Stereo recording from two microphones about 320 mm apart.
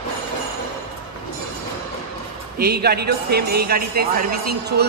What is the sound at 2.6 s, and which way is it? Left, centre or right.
Speech, right.